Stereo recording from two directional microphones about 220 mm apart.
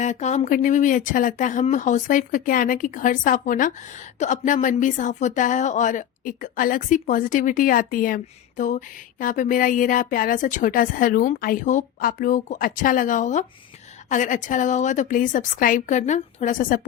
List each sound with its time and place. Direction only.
0.0 s speech: 30° left (ahead or behind)